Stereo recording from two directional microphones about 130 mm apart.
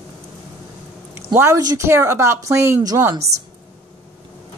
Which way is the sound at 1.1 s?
20° right (ahead or behind).